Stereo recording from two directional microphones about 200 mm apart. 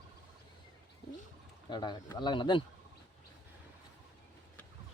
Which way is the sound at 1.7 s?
20° left (ahead or behind).